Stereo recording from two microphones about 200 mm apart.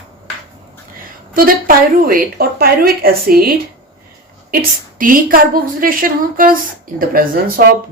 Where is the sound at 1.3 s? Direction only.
45° right (ahead or behind).